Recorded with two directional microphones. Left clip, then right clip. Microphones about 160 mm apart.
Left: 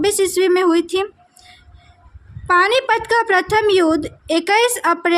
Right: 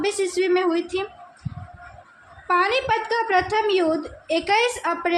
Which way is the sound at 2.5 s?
50° left (ahead or behind).